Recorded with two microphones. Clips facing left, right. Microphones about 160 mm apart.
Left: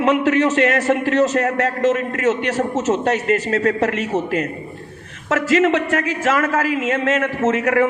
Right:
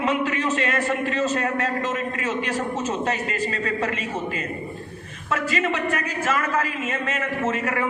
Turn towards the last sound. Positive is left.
turn(degrees=80)